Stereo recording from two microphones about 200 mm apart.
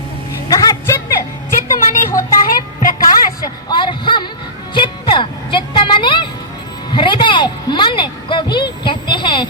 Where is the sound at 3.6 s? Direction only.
25° left (ahead or behind).